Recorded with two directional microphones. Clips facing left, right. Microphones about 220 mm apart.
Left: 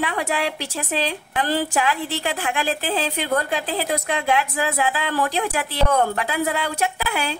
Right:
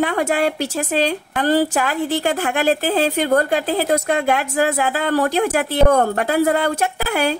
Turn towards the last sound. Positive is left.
turn(degrees=-45)  # may be behind; listen again after turning